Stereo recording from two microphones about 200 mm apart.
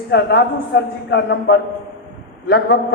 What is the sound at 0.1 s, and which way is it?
A man's voice, 55° left (ahead or behind).